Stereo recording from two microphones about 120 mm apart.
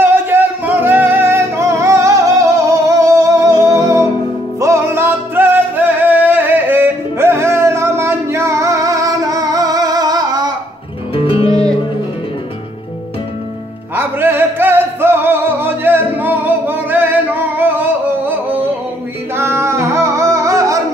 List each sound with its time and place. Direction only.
0.0 s music: 20° right (ahead or behind); by 10.5 s 35° right (ahead or behind)
11.1 s music: 50° left (ahead or behind)
13.9 s music: 15° right (ahead or behind)